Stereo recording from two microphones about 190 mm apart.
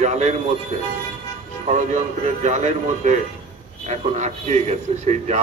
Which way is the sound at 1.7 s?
40° right (ahead or behind).